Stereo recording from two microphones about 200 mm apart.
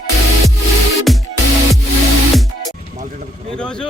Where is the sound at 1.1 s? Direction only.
Centre (ahead or behind).